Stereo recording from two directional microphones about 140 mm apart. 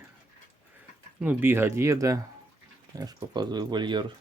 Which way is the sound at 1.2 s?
15° right (ahead or behind).